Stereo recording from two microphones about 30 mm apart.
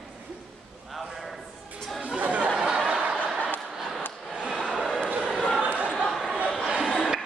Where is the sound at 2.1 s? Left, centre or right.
Right.